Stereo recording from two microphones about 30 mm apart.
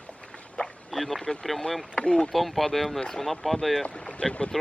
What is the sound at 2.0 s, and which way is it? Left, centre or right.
Speech, left.